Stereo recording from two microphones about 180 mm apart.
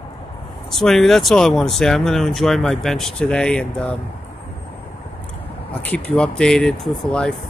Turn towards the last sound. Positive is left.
turn(degrees=5)  # may be behind; listen again after turning